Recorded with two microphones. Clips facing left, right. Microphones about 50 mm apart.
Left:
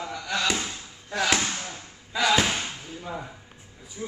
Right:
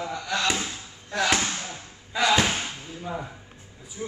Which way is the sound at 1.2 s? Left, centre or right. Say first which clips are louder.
Even; centre.